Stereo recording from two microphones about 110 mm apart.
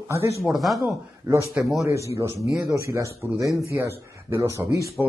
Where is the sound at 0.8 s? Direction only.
30° right (ahead or behind).